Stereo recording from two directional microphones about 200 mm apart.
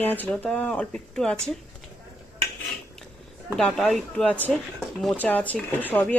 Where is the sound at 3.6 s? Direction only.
5° left (ahead or behind).